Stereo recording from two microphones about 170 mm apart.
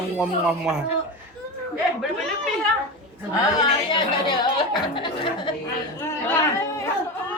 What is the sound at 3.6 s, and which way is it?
Speech, 25° left (ahead or behind).